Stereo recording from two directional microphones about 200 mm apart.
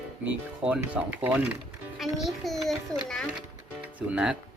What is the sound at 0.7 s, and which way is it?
Speech, 10° right (ahead or behind).